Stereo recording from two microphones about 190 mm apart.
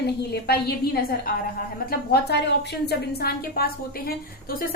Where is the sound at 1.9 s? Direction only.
60° left (ahead or behind).